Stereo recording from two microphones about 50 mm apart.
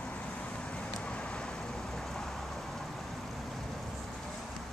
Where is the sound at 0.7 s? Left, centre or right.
Left.